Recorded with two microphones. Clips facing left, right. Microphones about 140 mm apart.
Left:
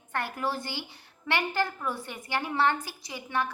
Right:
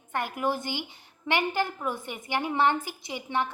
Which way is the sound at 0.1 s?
15° right (ahead or behind).